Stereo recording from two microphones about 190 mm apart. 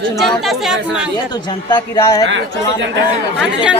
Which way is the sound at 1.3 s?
25° left (ahead or behind).